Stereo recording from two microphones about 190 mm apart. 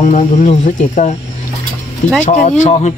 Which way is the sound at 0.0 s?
40° left (ahead or behind).